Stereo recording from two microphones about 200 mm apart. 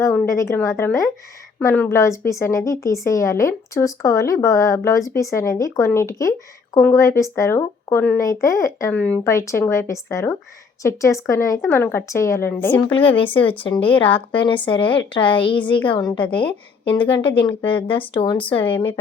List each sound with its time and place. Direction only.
0.0 s speech: 15° left (ahead or behind)
12.9 s speech: 25° left (ahead or behind)